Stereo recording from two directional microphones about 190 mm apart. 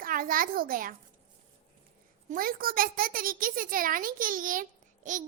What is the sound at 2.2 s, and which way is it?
Speech, 50° right (ahead or behind).